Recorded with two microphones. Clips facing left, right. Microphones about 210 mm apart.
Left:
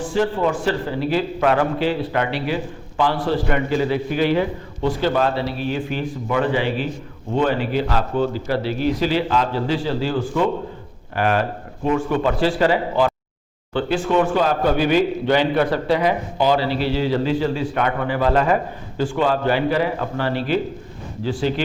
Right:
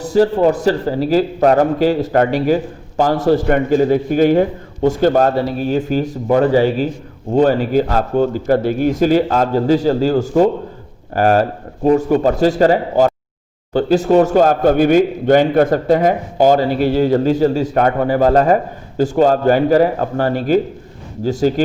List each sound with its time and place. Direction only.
0.0 s a man's voice: 40° right (ahead or behind)